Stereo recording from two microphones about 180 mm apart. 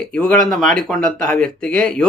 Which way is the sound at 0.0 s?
5° left (ahead or behind).